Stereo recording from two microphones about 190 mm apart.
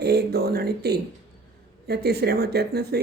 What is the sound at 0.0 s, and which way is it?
Speech, 60° right (ahead or behind).